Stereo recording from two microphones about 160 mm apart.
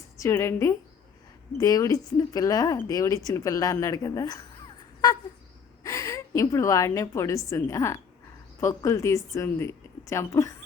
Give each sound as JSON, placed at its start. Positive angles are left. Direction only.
{"t": 0.2, "sound": "a woman's voice", "side_deg": 15}
{"t": 5.8, "sound": "a woman's voice", "side_deg": 20}